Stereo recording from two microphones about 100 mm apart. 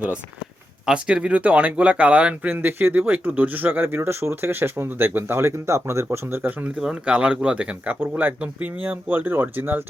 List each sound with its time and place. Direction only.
0.9 s speech: 10° right (ahead or behind)
6.7 s speech: 10° right (ahead or behind)